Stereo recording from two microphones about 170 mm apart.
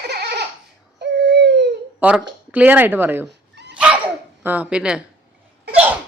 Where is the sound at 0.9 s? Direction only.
90° right.